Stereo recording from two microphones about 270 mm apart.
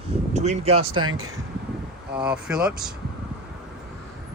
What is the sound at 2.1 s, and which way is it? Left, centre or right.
Speech, centre.